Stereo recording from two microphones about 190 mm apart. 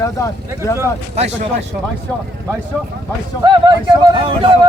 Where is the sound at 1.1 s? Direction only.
35° right (ahead or behind).